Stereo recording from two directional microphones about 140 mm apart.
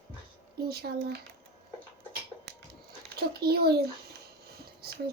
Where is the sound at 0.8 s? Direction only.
90° right.